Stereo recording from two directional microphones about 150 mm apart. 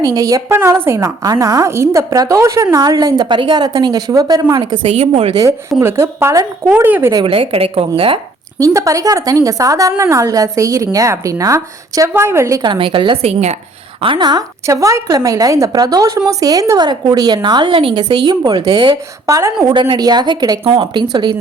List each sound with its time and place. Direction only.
0.0 s a woman's voice: 25° right (ahead or behind)
4.9 s a woman's voice: 45° right (ahead or behind)
5.3 s a woman's voice: 25° right (ahead or behind)
7.3 s a woman's voice: 40° right (ahead or behind)
8.5 s a woman's voice: 20° right (ahead or behind)